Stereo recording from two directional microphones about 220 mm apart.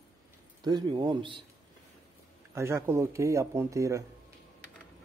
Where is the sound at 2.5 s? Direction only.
15° right (ahead or behind).